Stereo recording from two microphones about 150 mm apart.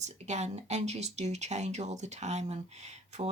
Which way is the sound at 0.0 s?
50° right (ahead or behind).